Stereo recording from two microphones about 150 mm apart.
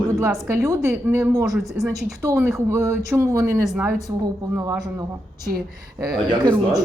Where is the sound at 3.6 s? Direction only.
5° right (ahead or behind).